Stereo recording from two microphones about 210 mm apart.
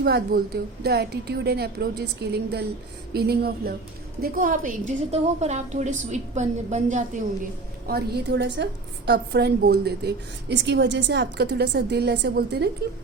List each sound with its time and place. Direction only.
0.0 s a woman's voice: 50° right (ahead or behind); by 6.8 s 35° right (ahead or behind)
7.9 s a woman's voice: 50° right (ahead or behind)